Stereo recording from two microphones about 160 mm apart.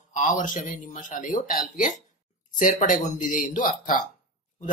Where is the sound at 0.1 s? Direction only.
55° left (ahead or behind).